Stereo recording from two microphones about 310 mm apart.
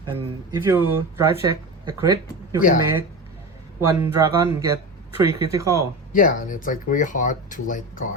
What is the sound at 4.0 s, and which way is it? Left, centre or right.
Speech, centre.